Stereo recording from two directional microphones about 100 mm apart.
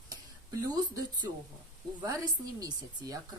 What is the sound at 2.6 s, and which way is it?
Speech, 35° right (ahead or behind).